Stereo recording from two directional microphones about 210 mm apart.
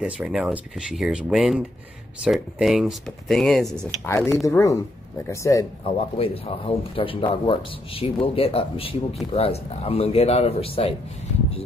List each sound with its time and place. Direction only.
0.0 s speech: 5° right (ahead or behind); by 5.7 s 15° left (ahead or behind)
6.1 s a man's voice: 25° left (ahead or behind)